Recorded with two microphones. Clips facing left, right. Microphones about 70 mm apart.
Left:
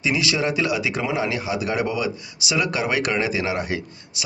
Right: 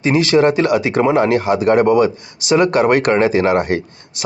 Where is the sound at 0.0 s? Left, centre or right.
Right.